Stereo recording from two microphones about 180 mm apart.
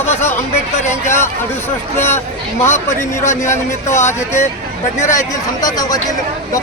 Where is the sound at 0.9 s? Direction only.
15° left (ahead or behind).